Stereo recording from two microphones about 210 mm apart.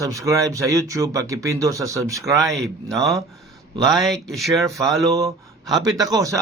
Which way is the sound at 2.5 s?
Centre (ahead or behind).